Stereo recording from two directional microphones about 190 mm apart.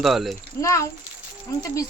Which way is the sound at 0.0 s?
Centre (ahead or behind).